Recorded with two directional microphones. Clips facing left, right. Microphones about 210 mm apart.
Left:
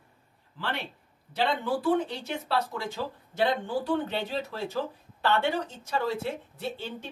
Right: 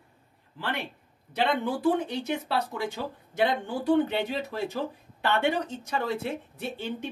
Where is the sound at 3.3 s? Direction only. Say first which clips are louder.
Even; 15° right (ahead or behind).